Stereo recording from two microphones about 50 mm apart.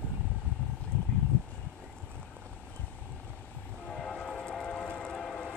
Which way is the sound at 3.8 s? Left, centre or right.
Centre.